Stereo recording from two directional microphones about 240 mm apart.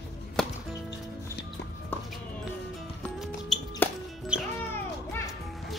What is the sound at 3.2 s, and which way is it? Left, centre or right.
Music, centre.